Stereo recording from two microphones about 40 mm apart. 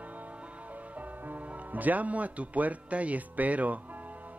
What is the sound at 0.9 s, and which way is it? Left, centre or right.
Speech, right.